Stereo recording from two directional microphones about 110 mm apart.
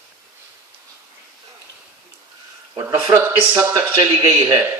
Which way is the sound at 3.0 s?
20° right (ahead or behind).